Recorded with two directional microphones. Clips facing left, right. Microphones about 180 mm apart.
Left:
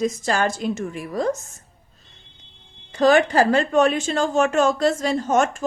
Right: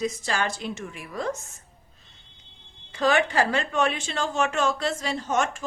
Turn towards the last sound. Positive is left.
turn(degrees=45)  # may be behind; listen again after turning